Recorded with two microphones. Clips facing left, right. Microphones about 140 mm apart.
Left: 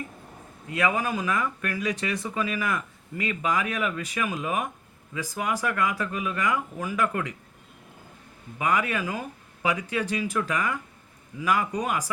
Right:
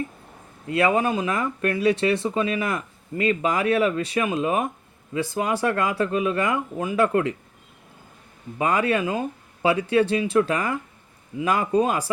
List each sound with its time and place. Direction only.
0.7 s speech: 30° right (ahead or behind)
8.5 s speech: 30° right (ahead or behind)